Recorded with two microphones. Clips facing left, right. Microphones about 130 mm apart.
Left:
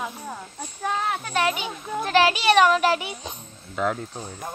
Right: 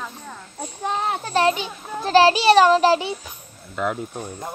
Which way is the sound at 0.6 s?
25° right (ahead or behind).